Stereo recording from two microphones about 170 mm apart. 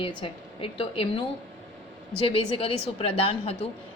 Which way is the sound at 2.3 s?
35° left (ahead or behind).